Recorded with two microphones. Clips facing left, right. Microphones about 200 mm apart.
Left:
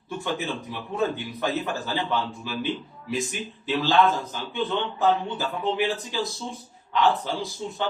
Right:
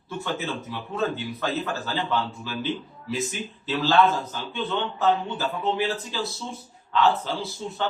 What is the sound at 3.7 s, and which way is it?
A man's voice, 15° left (ahead or behind).